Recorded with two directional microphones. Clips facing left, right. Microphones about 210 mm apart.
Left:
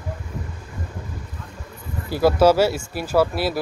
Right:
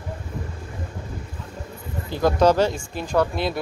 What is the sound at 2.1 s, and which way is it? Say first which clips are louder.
Speech: left 2 dB; 5° left (ahead or behind).